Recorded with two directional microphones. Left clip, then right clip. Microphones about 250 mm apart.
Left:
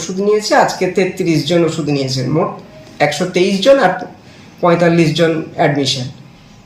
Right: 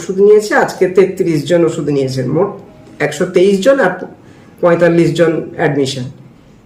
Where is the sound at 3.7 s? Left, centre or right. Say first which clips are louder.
Left 3 dB; centre.